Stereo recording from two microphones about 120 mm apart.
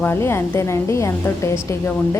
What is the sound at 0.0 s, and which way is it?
A woman's voice, 20° left (ahead or behind).